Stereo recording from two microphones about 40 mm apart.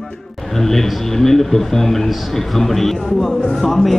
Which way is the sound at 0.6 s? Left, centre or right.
Centre.